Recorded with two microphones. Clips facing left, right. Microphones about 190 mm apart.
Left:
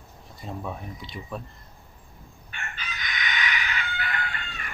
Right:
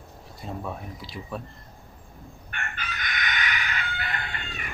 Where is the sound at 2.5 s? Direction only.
55° right (ahead or behind).